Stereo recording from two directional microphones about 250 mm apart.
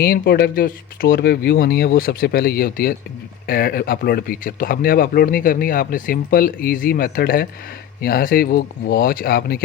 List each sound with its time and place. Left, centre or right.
0.0 s speech: left